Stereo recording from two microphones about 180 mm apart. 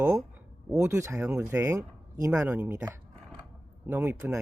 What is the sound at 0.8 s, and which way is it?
Speech, 15° right (ahead or behind).